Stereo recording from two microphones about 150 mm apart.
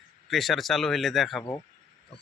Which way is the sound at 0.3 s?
Centre (ahead or behind).